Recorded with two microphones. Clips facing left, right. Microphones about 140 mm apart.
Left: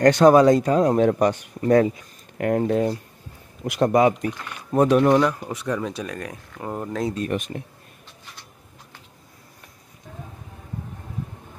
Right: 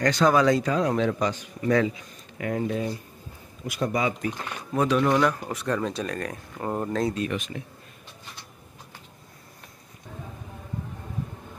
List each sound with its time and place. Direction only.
0.0 s speech: 55° left (ahead or behind)
3.6 s speech: 70° left (ahead or behind); by 5.1 s 45° left (ahead or behind)
5.1 s speech: 15° left (ahead or behind)
7.2 s speech: 50° left (ahead or behind)